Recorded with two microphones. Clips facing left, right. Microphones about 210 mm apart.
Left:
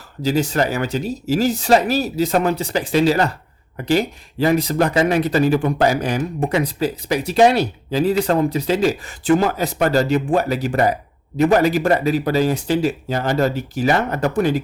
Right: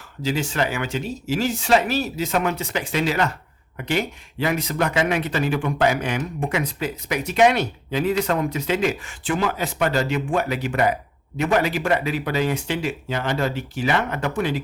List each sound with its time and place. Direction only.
0.2 s speech: 40° left (ahead or behind)